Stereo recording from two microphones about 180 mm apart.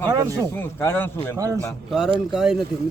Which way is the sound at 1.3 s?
20° right (ahead or behind).